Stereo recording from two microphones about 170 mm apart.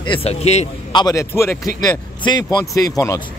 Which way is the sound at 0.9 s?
25° left (ahead or behind).